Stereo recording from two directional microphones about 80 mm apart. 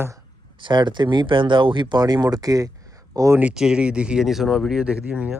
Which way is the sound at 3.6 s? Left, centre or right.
Centre.